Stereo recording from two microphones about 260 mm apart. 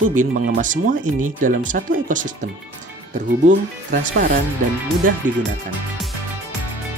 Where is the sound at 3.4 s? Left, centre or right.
Right.